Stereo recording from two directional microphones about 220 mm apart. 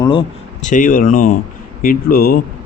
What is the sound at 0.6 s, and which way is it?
Speech, 35° left (ahead or behind).